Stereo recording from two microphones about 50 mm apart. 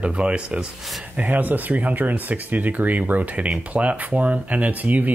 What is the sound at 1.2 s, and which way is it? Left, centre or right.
Speech, right.